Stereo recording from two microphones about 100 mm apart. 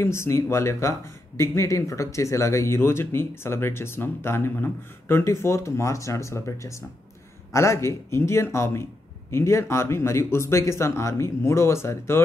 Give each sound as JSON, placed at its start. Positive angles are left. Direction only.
{"t": 0.0, "sound": "speech", "side_deg": 25}